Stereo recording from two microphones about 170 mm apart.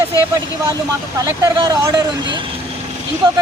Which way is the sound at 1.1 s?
20° right (ahead or behind).